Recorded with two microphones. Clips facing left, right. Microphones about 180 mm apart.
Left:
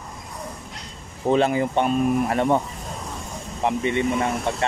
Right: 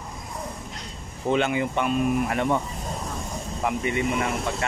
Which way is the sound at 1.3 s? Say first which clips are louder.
Left 4 dB; 35° left (ahead or behind).